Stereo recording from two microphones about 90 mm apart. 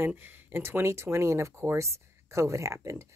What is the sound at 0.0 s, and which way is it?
Speech, 25° right (ahead or behind).